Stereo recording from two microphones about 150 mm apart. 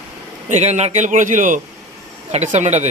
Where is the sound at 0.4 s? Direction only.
50° right (ahead or behind).